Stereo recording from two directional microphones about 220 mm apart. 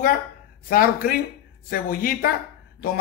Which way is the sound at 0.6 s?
40° left (ahead or behind).